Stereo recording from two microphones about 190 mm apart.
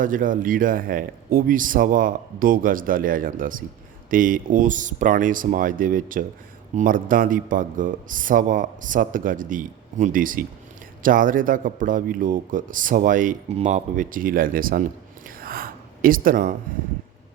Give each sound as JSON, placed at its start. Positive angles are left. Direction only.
{"t": 0.0, "sound": "speech", "side_deg": -45}
{"t": 15.4, "sound": "gasp", "side_deg": -50}